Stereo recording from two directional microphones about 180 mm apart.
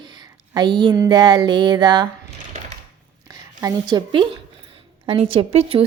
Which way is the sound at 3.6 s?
20° right (ahead or behind).